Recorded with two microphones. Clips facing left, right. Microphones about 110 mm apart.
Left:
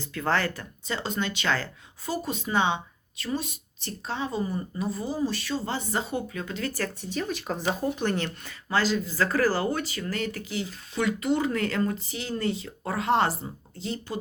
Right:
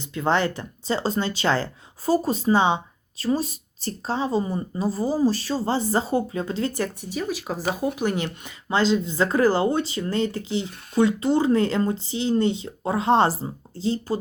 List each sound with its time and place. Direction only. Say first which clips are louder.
0.0 s speech: right 4 dB; 20° right (ahead or behind)